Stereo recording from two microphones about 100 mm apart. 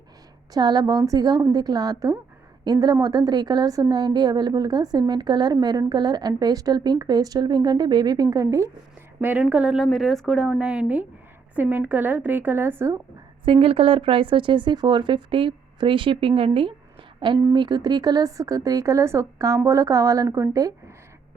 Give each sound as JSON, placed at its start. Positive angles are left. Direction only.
{"t": 0.5, "sound": "a woman's voice", "side_deg": -40}
{"t": 9.4, "sound": "a woman's voice", "side_deg": -10}
{"t": 13.4, "sound": "speech", "side_deg": -65}